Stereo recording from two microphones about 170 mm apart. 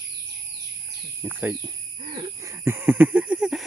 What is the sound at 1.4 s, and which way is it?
Speech, 10° right (ahead or behind).